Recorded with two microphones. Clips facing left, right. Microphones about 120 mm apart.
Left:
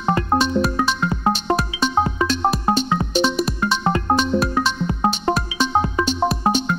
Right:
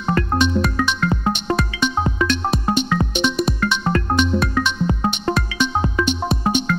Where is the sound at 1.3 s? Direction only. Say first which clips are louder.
Left 1 dB; 35° left (ahead or behind).